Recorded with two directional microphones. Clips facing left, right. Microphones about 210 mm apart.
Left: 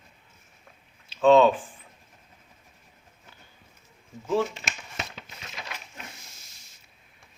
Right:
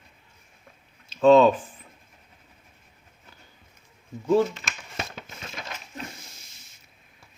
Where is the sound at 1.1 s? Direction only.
40° right (ahead or behind).